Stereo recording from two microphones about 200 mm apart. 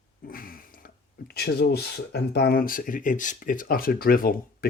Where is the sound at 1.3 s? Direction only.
50° left (ahead or behind).